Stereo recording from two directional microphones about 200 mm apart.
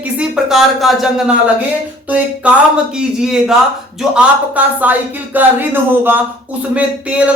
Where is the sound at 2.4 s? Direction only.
5° right (ahead or behind).